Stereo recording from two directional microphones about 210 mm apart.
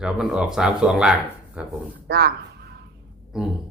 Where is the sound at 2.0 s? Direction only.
50° right (ahead or behind).